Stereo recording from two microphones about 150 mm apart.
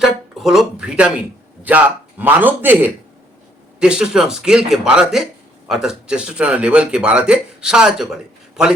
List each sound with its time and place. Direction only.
0.0 s a man's voice: centre (ahead or behind)